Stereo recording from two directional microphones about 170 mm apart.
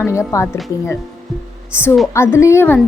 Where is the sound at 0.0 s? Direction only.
15° left (ahead or behind).